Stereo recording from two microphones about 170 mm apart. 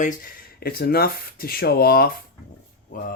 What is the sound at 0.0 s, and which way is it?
Speech, 60° left (ahead or behind).